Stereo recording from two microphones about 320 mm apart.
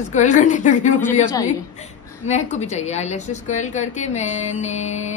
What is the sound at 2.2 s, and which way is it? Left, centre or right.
A woman's voice, left.